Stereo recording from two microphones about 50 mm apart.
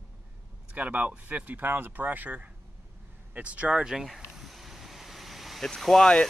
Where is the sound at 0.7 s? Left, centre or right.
Right.